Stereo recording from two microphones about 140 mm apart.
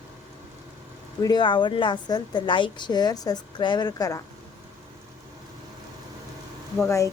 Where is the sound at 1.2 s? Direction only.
30° left (ahead or behind).